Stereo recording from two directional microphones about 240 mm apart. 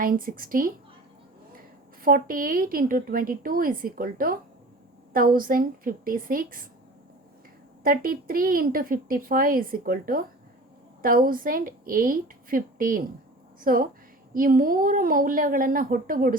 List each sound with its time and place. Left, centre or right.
0.0 s a woman's voice: right
2.0 s a woman's voice: right
7.9 s a woman's voice: right